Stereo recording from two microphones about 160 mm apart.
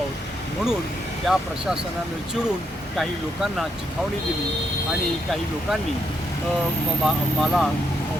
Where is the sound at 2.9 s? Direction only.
Centre (ahead or behind).